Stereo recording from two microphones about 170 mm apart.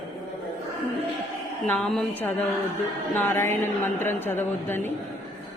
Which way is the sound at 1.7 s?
5° left (ahead or behind).